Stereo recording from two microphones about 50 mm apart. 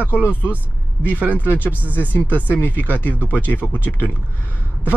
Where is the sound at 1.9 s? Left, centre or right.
Left.